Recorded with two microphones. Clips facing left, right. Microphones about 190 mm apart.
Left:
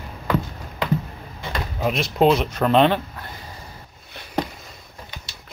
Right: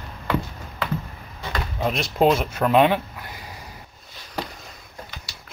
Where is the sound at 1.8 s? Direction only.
Centre (ahead or behind).